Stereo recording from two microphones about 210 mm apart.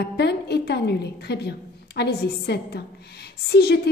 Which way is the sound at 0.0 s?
50° left (ahead or behind).